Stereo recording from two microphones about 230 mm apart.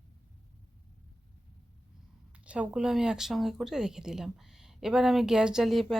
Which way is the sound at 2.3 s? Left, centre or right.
Centre.